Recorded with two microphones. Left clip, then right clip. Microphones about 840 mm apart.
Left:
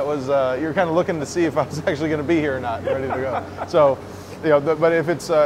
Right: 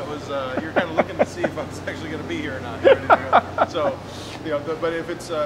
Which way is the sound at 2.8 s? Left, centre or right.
Right.